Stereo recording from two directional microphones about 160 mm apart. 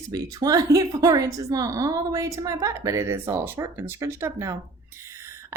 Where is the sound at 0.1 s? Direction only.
20° right (ahead or behind).